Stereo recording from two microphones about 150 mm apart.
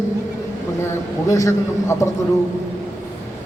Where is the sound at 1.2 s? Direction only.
20° left (ahead or behind).